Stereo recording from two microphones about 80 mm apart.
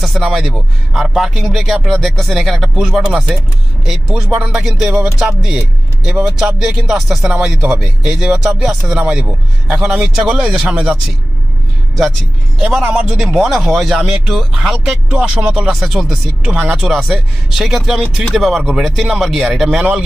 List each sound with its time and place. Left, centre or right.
0.2 s a man's voice: centre
12.5 s speech: centre
12.8 s speech: centre
13.1 s speech: centre